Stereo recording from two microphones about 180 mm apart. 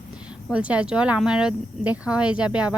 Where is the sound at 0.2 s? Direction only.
5° right (ahead or behind).